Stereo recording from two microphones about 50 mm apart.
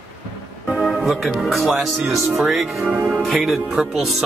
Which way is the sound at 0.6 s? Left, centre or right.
Centre.